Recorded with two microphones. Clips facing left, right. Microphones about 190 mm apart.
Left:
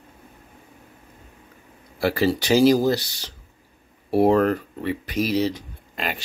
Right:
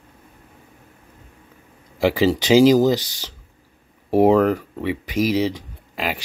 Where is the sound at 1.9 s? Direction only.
15° right (ahead or behind).